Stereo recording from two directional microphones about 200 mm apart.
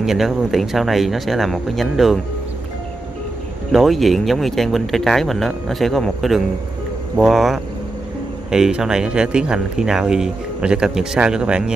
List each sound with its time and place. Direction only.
0.0 s speech: centre (ahead or behind)
3.7 s speech: centre (ahead or behind)